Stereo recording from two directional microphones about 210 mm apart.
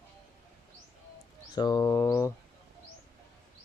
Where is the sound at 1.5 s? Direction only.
20° left (ahead or behind).